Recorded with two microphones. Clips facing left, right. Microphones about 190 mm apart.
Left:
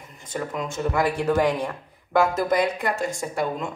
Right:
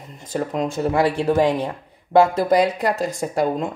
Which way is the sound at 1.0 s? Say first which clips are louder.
Right 2 dB; 20° right (ahead or behind).